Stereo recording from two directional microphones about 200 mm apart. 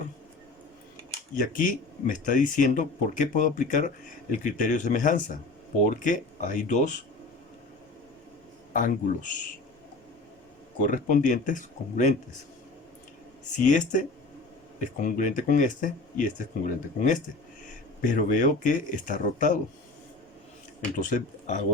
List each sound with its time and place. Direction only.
1.4 s speech: 40° left (ahead or behind)
8.7 s speech: 40° left (ahead or behind)
10.8 s speech: 40° left (ahead or behind)
13.7 s speech: 40° left (ahead or behind)
21.0 s speech: 40° left (ahead or behind)